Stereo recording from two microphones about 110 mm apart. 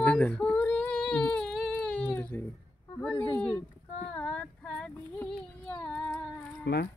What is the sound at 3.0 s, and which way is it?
Speech, 15° left (ahead or behind).